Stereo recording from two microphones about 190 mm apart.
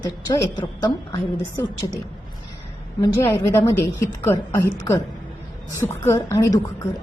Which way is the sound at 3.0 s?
15° left (ahead or behind).